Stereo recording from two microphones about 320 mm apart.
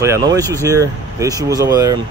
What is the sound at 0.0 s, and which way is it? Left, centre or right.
Speech, centre.